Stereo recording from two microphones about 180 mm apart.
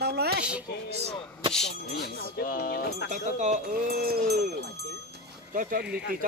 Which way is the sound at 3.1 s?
45° right (ahead or behind).